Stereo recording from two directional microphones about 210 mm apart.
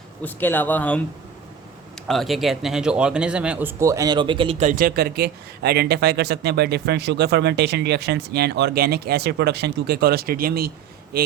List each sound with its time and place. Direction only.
0.3 s speech: 10° left (ahead or behind)
2.0 s speech: centre (ahead or behind); by 4.7 s 25° right (ahead or behind)
4.7 s speech: 45° right (ahead or behind)